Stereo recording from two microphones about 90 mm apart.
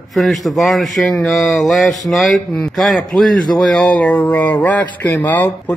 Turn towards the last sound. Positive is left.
turn(degrees=20)  # may be behind; listen again after turning